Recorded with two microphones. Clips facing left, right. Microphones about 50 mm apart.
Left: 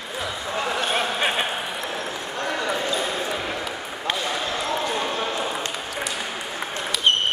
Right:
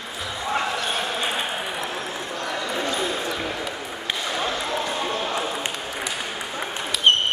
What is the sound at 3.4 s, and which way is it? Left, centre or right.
Basketball bounce, centre.